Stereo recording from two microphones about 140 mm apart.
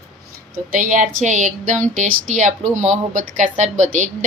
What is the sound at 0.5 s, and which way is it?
Speech, 80° right.